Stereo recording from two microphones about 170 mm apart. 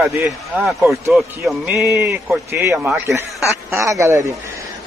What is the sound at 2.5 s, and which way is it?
A man's voice, 15° right (ahead or behind).